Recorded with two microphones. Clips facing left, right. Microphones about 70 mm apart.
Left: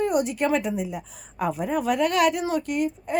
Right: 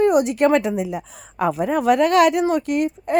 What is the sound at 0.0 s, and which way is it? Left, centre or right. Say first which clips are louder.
A woman's voice: right 7 dB; right.